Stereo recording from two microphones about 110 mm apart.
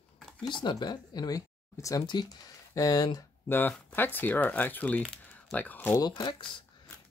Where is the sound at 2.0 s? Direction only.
40° left (ahead or behind).